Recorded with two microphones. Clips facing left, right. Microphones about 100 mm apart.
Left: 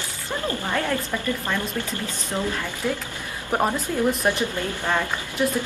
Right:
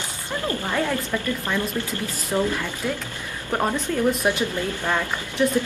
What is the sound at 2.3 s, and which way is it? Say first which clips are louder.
Speech: right 5 dB; 15° right (ahead or behind).